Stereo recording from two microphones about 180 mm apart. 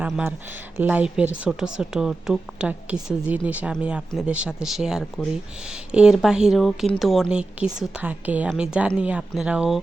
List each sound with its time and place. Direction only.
0.0 s speech: 10° right (ahead or behind)